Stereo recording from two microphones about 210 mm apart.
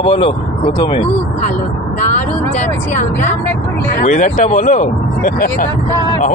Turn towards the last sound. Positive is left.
turn(degrees=40)  # may be behind; listen again after turning